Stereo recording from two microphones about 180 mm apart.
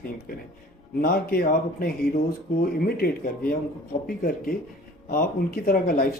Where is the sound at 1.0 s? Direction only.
55° left (ahead or behind).